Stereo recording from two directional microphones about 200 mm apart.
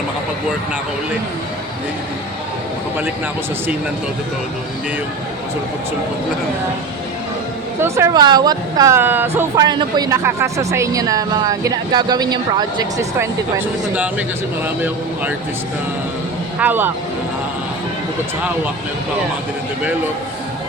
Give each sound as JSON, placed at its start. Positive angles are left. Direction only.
{"t": 7.8, "sound": "speech", "side_deg": -15}
{"t": 16.6, "sound": "speech", "side_deg": -10}